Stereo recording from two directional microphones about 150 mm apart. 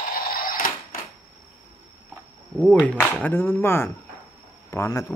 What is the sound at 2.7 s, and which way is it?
Speech, 10° left (ahead or behind).